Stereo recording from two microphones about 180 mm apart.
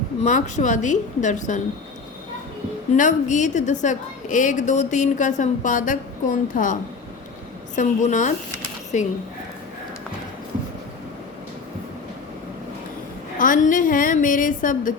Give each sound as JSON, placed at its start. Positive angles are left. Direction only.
{"t": 0.2, "sound": "a woman's voice", "side_deg": 40}
{"t": 2.9, "sound": "a woman's voice", "side_deg": 45}
{"t": 7.8, "sound": "a woman's voice", "side_deg": 45}
{"t": 13.4, "sound": "a woman's voice", "side_deg": 50}